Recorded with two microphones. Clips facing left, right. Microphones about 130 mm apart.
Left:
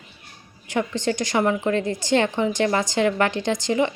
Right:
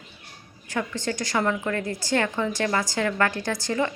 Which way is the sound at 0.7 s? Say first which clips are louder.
Left 5 dB; 20° left (ahead or behind).